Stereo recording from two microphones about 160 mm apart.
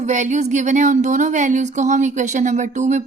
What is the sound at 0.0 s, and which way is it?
Speech, 50° right (ahead or behind).